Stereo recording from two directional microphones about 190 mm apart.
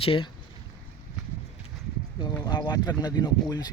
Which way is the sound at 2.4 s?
25° left (ahead or behind).